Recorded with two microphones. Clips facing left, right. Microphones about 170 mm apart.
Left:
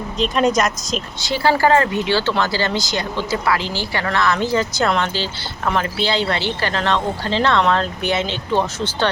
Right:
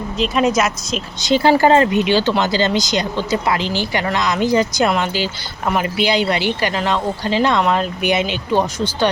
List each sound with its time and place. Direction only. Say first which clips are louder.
0.2 s speech: right 1 dB; 5° right (ahead or behind)
1.2 s speech: right 4 dB; 20° right (ahead or behind)